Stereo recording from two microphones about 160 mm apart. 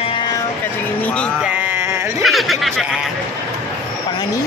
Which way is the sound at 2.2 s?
Centre (ahead or behind).